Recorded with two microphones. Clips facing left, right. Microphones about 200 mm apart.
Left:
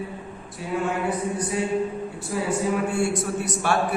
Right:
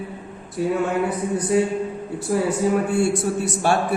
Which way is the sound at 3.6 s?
30° right (ahead or behind).